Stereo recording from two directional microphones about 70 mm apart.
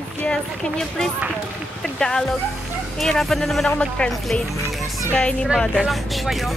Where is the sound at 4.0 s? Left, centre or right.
Centre.